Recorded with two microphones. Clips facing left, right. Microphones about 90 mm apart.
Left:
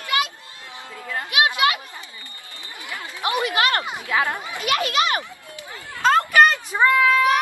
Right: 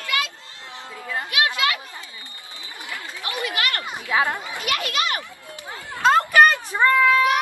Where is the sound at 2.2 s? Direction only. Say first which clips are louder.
Even; 20° right (ahead or behind).